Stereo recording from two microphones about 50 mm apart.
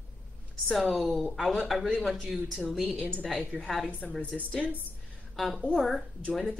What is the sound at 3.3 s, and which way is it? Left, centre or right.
Speech, centre.